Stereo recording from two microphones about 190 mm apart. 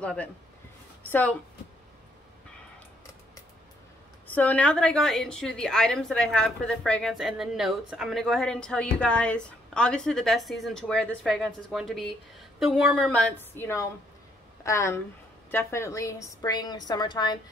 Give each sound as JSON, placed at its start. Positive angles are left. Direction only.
{"t": 0.0, "sound": "a woman's voice", "side_deg": 5}
{"t": 4.3, "sound": "a woman's voice", "side_deg": 10}